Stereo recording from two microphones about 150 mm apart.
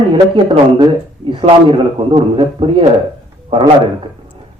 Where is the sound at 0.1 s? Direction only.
30° right (ahead or behind).